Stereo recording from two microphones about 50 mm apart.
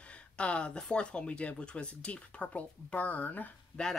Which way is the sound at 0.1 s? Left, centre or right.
Left.